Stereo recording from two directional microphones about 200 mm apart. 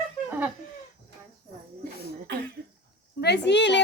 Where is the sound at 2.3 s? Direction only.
55° right (ahead or behind).